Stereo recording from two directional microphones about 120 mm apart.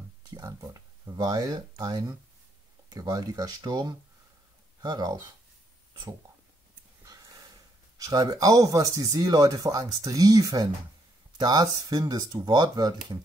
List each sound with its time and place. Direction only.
0.3 s speech: 30° right (ahead or behind)
8.0 s speech: 30° right (ahead or behind)